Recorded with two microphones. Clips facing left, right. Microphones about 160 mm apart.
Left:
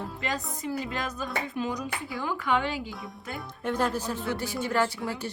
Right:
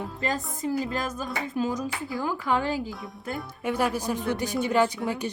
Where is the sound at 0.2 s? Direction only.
45° right (ahead or behind).